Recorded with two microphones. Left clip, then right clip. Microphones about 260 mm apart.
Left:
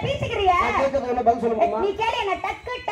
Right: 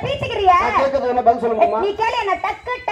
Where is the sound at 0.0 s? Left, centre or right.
Right.